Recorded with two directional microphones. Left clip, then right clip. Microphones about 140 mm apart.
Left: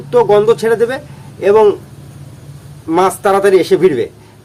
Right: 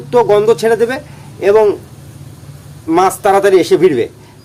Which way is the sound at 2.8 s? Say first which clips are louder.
Right 1 dB; 15° right (ahead or behind).